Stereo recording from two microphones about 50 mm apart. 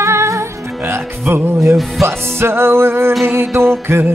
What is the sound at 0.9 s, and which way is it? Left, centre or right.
Music, right.